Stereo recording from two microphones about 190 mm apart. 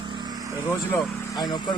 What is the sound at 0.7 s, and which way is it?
A man's voice, 10° left (ahead or behind).